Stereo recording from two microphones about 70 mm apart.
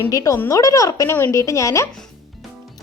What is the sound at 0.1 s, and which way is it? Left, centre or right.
A woman's voice, left.